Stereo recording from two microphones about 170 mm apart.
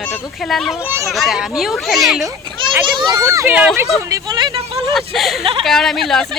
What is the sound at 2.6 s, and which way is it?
Children playing, 30° right (ahead or behind).